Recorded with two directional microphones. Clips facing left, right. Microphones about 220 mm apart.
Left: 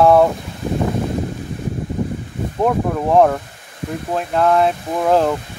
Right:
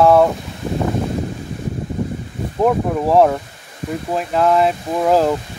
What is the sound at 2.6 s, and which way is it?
Speech, 5° right (ahead or behind).